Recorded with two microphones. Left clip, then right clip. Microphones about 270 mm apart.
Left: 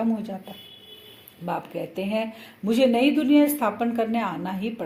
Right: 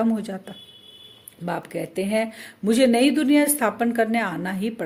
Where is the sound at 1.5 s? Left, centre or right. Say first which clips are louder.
Right 1 dB; right.